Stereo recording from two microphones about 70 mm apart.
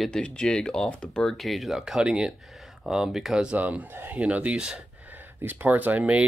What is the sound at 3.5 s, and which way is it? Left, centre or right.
Speech, right.